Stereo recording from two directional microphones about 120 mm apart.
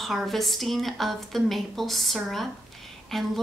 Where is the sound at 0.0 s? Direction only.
Centre (ahead or behind).